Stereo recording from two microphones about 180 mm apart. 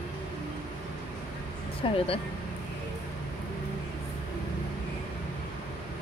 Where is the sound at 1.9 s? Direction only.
30° left (ahead or behind).